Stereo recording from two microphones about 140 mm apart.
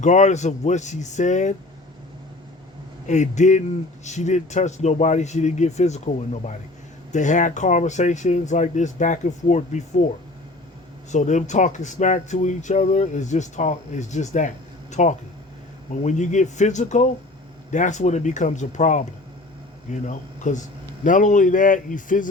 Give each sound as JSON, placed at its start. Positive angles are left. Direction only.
{"t": 0.0, "sound": "speech", "side_deg": 60}
{"t": 3.1, "sound": "speech", "side_deg": 60}